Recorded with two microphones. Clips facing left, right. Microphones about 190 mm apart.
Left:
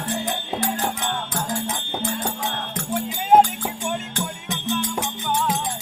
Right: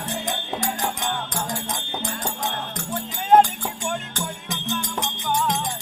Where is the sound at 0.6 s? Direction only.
5° left (ahead or behind).